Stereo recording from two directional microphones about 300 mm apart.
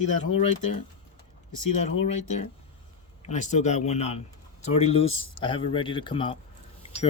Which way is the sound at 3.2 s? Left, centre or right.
Left.